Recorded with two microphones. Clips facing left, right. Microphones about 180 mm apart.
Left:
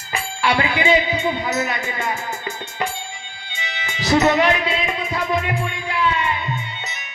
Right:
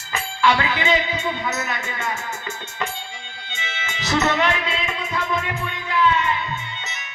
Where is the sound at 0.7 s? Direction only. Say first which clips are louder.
Left 4 dB; 10° left (ahead or behind).